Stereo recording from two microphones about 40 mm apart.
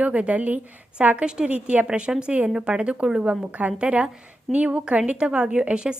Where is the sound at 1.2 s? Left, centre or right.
Right.